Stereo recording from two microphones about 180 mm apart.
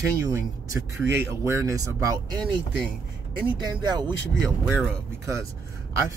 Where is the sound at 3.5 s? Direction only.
25° right (ahead or behind).